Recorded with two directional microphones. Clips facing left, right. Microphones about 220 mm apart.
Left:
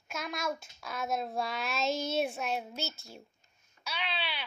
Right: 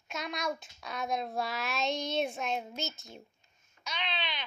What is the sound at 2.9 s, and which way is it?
Speech, 15° right (ahead or behind).